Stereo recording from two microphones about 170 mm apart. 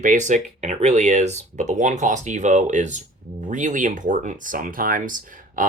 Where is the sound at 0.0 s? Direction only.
45° right (ahead or behind).